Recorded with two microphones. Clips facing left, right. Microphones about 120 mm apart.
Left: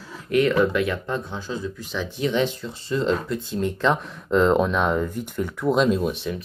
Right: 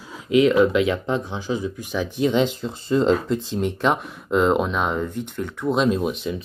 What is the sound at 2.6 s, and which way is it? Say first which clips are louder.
Speech: right 5 dB; 35° right (ahead or behind).